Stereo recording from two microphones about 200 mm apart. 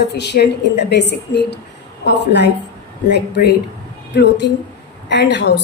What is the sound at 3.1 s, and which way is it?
A woman's voice, 55° left (ahead or behind).